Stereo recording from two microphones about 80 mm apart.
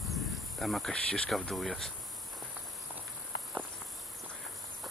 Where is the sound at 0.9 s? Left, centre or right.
Centre.